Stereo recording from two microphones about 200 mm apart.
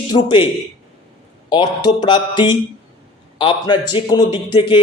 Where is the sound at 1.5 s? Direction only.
20° left (ahead or behind).